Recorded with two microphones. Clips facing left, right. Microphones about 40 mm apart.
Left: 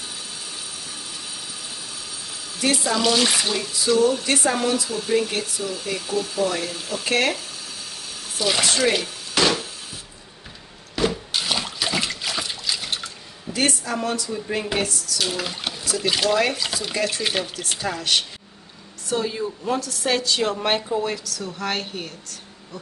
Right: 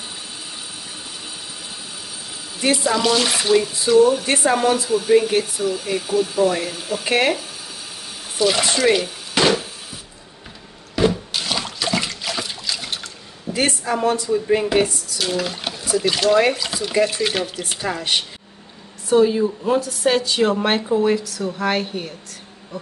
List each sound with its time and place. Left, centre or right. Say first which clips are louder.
2.8 s speech: right 1 dB; centre
3.9 s speech: right 5 dB; centre
8.4 s speech: right 3 dB; centre
9.3 s a sound: right 3 dB; right
11.0 s water: right 4 dB; centre
13.5 s speech: right 3 dB; right
15.1 s speech: right 4 dB; centre
17.6 s speech: right 2 dB; centre
19.0 s speech: right 9 dB; centre